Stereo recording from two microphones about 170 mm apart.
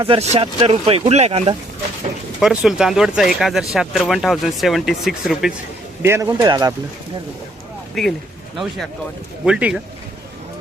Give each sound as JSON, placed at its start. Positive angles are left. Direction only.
{"t": 0.1, "sound": "speech", "side_deg": -35}
{"t": 2.4, "sound": "speech", "side_deg": -5}
{"t": 6.0, "sound": "speech", "side_deg": -15}
{"t": 8.0, "sound": "speech", "side_deg": 0}
{"t": 9.4, "sound": "speech", "side_deg": -5}